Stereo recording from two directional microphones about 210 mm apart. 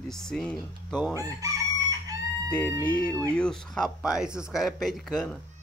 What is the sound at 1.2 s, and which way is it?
Chicken, 15° right (ahead or behind).